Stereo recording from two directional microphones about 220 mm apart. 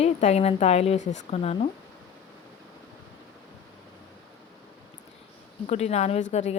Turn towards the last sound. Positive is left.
turn(degrees=30)  # may be behind; listen again after turning